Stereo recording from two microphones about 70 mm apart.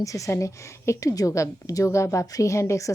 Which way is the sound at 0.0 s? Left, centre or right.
Left.